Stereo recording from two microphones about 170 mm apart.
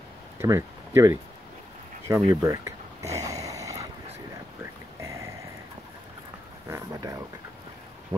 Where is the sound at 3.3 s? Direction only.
20° right (ahead or behind).